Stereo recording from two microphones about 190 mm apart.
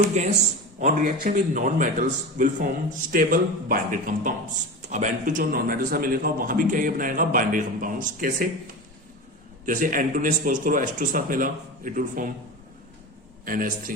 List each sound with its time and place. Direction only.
0.2 s a man's voice: 40° right (ahead or behind)
9.6 s a man's voice: 45° right (ahead or behind)
13.4 s a man's voice: 45° right (ahead or behind)